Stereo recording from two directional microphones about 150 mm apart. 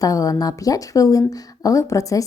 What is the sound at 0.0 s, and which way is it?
Speech, 25° left (ahead or behind).